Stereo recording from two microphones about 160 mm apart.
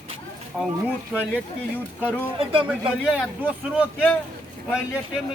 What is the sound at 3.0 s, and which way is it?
Speech, 10° right (ahead or behind).